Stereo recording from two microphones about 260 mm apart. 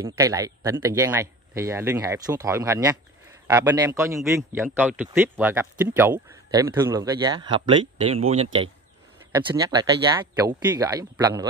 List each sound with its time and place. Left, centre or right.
0.0 s speech: centre